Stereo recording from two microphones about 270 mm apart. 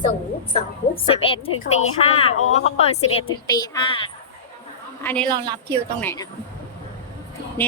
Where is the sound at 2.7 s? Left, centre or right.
Left.